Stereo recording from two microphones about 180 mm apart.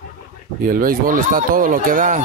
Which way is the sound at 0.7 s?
50° right (ahead or behind).